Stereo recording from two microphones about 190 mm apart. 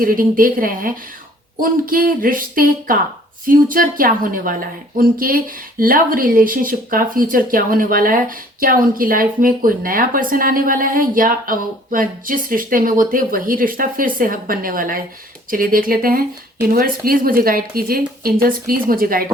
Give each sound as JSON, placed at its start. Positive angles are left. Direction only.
{"t": 0.0, "sound": "a woman's voice", "side_deg": -50}